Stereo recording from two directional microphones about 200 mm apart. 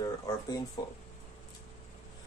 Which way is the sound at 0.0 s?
20° left (ahead or behind).